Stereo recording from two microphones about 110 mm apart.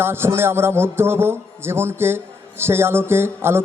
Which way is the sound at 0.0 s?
20° right (ahead or behind).